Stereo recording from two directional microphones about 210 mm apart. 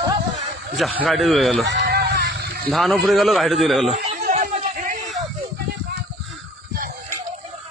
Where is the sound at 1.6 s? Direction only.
55° right (ahead or behind).